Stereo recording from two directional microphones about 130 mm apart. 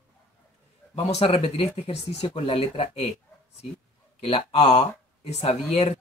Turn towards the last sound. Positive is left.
turn(degrees=50)  # may be behind; listen again after turning